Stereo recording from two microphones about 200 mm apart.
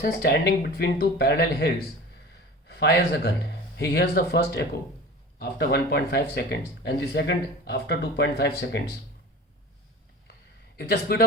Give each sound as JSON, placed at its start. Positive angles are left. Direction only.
{"t": 0.0, "sound": "a man's voice", "side_deg": 50}
{"t": 10.8, "sound": "a man's voice", "side_deg": 55}